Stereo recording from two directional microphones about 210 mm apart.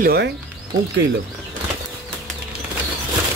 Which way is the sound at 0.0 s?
50° right (ahead or behind).